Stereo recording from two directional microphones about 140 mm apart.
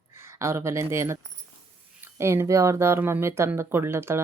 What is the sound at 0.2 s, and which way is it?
Speech, 20° right (ahead or behind).